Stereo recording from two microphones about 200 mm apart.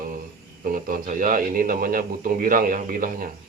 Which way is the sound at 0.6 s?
45° right (ahead or behind).